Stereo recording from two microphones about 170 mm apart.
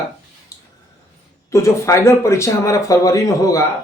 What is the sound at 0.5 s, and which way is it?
Squish, 20° left (ahead or behind).